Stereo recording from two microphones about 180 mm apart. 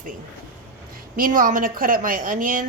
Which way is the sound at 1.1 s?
50° right (ahead or behind).